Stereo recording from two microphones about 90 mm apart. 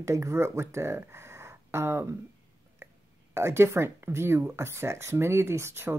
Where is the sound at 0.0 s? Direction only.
35° right (ahead or behind).